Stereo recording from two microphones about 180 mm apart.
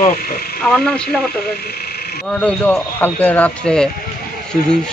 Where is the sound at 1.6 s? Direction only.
60° left (ahead or behind).